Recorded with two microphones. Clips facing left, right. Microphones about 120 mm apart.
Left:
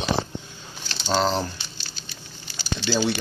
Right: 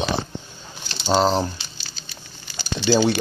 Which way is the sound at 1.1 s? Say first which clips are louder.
Right 4 dB; 20° right (ahead or behind).